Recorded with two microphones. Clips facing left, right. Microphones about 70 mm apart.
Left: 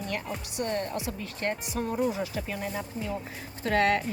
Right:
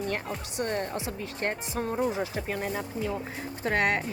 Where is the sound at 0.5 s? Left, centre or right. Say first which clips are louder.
Even; right.